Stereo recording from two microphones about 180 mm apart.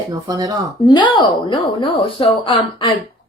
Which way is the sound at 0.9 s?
25° left (ahead or behind).